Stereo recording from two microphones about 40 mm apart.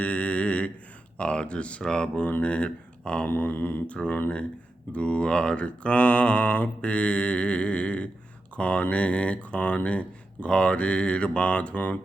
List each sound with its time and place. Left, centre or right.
0.0 s a sound: left
1.2 s mantra: left
1.8 s mantra: centre
2.4 s speech: left
3.4 s mantra: left
3.8 s speech: left
4.9 s mantra: left
8.5 s speech: left